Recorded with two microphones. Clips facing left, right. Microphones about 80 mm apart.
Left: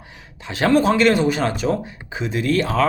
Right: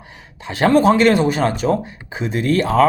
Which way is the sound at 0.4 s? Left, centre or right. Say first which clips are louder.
Right 3 dB; right.